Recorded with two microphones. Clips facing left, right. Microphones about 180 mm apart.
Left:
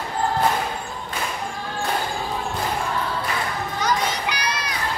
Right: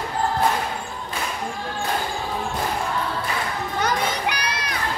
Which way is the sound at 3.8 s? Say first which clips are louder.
Even; 55° right (ahead or behind).